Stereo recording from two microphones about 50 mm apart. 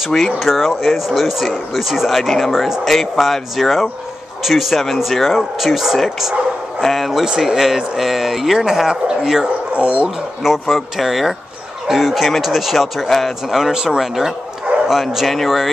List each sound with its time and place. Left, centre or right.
0.4 s speech: centre
9.8 s speech: right
10.4 s speech: centre